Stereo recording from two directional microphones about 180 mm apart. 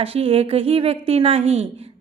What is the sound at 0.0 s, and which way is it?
A woman's voice, 30° right (ahead or behind).